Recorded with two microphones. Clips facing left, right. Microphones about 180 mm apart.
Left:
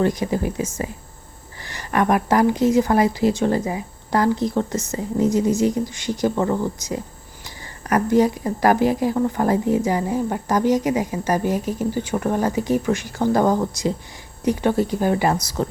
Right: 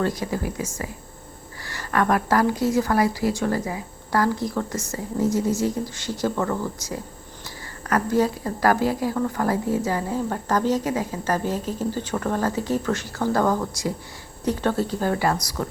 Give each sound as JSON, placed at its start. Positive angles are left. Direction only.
{"t": 0.0, "sound": "a woman's voice", "side_deg": 20}